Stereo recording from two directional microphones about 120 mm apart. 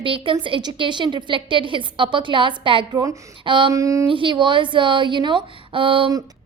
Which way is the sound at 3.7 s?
25° right (ahead or behind).